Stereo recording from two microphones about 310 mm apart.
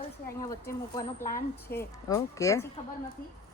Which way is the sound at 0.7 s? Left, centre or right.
Centre.